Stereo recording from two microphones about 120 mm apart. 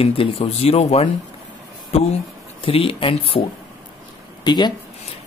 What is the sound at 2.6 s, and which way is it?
Speech, 50° left (ahead or behind).